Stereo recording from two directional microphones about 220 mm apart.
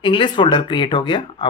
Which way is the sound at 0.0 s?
20° left (ahead or behind).